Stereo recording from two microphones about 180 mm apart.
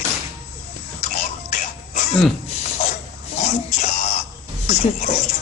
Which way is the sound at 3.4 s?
40° left (ahead or behind).